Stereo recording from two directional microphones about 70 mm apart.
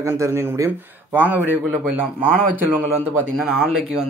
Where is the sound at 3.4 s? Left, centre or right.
Centre.